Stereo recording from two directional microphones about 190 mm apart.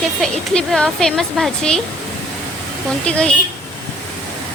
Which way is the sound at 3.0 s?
5° left (ahead or behind).